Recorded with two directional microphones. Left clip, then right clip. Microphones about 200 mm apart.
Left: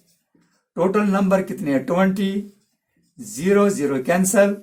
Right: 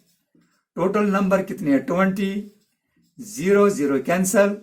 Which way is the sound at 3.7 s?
25° left (ahead or behind).